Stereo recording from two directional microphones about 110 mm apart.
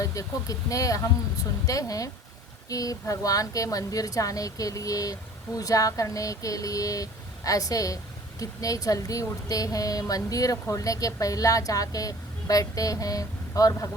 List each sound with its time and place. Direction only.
0.0 s a woman's voice: 30° left (ahead or behind)